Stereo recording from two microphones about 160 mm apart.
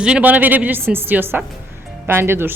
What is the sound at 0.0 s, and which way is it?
A woman's voice, 10° right (ahead or behind).